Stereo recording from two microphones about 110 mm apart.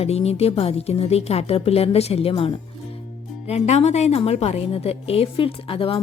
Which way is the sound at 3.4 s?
80° left.